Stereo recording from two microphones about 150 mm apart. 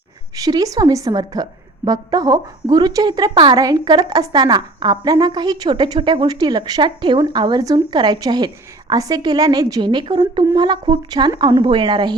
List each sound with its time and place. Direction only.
0.3 s a woman's voice: 25° right (ahead or behind)